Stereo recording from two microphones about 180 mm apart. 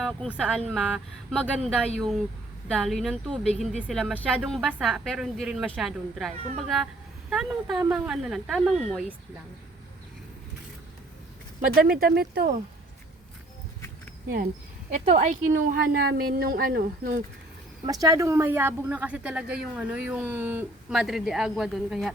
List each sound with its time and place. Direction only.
0.0 s a woman's voice: 5° right (ahead or behind)
11.9 s speech: 55° right (ahead or behind)
14.9 s a woman's voice: 45° right (ahead or behind)
17.8 s speech: 20° right (ahead or behind); by 22.1 s centre (ahead or behind)